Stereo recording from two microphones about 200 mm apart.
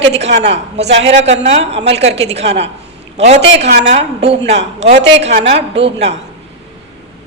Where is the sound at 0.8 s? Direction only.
60° right (ahead or behind).